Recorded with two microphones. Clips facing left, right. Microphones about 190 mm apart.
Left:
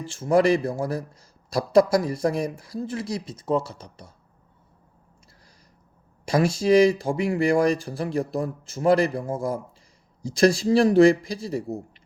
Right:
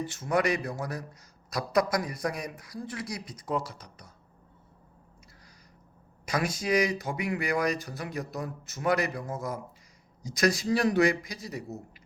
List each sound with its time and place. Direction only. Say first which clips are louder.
0.1 s speech: left 10 dB; 30° left (ahead or behind)
6.2 s speech: left 9 dB; 30° left (ahead or behind)